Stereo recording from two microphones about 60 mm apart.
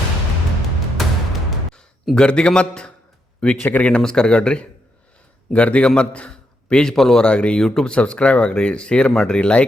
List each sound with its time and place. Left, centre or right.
0.9 s music: centre
2.1 s speech: centre
3.6 s a man's voice: left
3.8 s a man's voice: centre
7.3 s speech: centre